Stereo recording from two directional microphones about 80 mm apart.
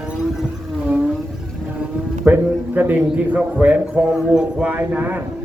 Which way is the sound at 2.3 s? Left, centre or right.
Right.